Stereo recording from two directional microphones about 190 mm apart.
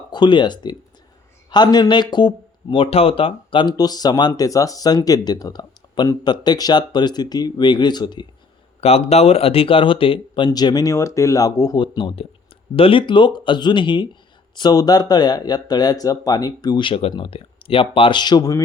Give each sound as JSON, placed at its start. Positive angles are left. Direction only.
{"t": 0.1, "sound": "speech", "side_deg": 25}